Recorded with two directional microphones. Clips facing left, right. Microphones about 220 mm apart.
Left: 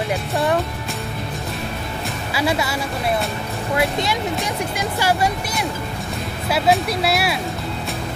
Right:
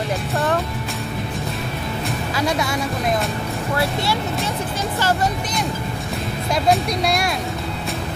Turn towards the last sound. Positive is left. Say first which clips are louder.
# even
turn(degrees=5)  # may be behind; listen again after turning